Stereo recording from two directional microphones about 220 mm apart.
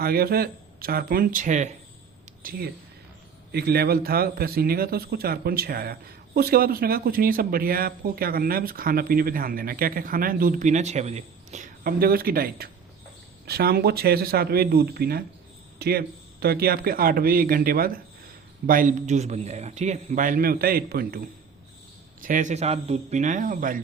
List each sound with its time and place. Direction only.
0.0 s a man's voice: 45° right (ahead or behind)